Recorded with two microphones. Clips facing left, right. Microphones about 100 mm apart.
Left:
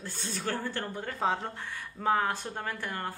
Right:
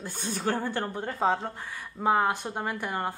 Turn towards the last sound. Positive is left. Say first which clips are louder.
# right 5 dB
turn(degrees=-15)  # may be behind; listen again after turning